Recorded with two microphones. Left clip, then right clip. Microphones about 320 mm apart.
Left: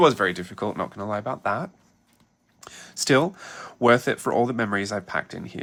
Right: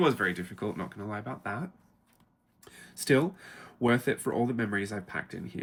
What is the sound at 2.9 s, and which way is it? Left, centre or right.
Speech, centre.